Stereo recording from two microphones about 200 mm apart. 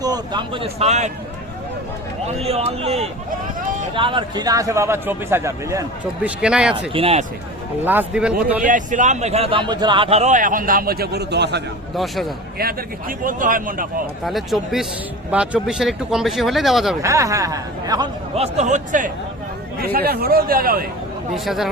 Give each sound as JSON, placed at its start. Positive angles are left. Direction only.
{"t": 0.0, "sound": "a man's voice", "side_deg": -20}
{"t": 2.2, "sound": "a man's voice", "side_deg": -30}
{"t": 6.9, "sound": "a man's voice", "side_deg": -30}
{"t": 7.9, "sound": "a man's voice", "side_deg": -5}
{"t": 8.6, "sound": "a man's voice", "side_deg": -40}
{"t": 11.9, "sound": "speech", "side_deg": 0}
{"t": 12.5, "sound": "a man's voice", "side_deg": -45}
{"t": 14.3, "sound": "speech", "side_deg": 0}
{"t": 17.0, "sound": "a man's voice", "side_deg": -15}
{"t": 21.3, "sound": "speech", "side_deg": 0}